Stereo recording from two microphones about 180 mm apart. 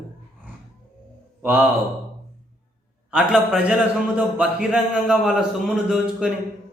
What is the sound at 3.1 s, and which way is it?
A man's voice, 5° right (ahead or behind).